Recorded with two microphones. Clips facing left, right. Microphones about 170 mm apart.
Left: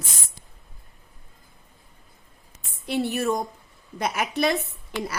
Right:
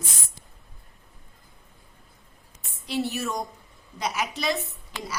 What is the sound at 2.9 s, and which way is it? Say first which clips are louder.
A woman's voice: left 4 dB; 55° left (ahead or behind).